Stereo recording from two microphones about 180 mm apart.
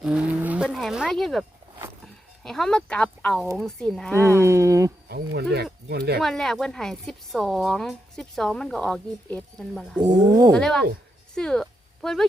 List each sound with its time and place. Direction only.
0.0 s a woman's voice: 5° right (ahead or behind)
4.2 s a sound: 15° right (ahead or behind)
5.0 s speech: 65° right (ahead or behind)
6.1 s a woman's voice: centre (ahead or behind)
10.0 s speech: 20° right (ahead or behind)
10.5 s a woman's voice: 5° left (ahead or behind)